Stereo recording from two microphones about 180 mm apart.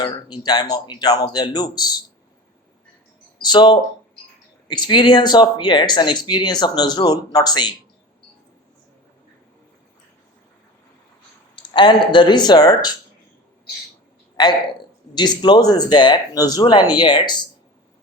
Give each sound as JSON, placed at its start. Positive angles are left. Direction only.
{"t": 0.0, "sound": "speech", "side_deg": 25}
{"t": 3.4, "sound": "speech", "side_deg": 25}
{"t": 11.5, "sound": "speech", "side_deg": 25}
{"t": 14.4, "sound": "speech", "side_deg": 25}